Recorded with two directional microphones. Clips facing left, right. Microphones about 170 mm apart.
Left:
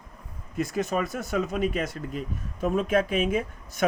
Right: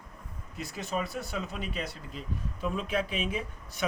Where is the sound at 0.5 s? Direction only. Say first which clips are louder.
Left 7 dB; 45° left (ahead or behind).